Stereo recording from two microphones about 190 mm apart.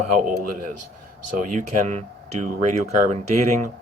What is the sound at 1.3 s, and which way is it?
Speech, 40° right (ahead or behind).